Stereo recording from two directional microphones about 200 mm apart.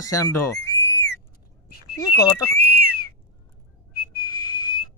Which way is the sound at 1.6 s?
50° left (ahead or behind).